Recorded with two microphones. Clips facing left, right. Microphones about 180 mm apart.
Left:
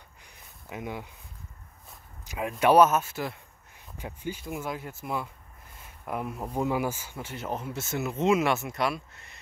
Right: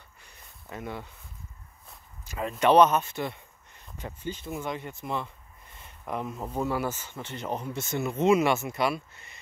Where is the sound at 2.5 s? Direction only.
5° left (ahead or behind).